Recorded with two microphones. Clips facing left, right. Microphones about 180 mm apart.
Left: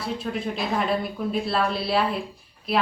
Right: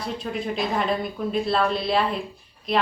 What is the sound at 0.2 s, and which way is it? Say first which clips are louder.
Speech: right 1 dB; centre (ahead or behind).